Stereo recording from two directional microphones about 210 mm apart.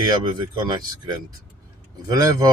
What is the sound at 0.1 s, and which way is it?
Speech, 20° right (ahead or behind).